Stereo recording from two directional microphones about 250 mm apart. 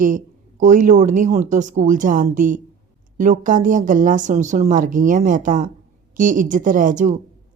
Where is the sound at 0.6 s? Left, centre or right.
Right.